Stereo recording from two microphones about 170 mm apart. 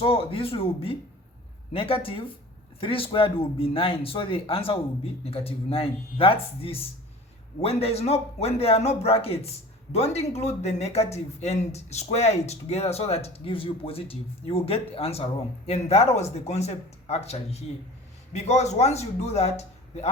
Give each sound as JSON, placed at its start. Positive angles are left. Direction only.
{"t": 0.0, "sound": "speech", "side_deg": 35}